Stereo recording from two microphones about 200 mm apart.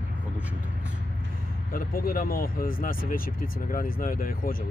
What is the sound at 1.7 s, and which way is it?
Speech, 45° left (ahead or behind).